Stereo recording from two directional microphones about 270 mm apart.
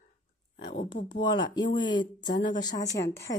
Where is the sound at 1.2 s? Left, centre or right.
Centre.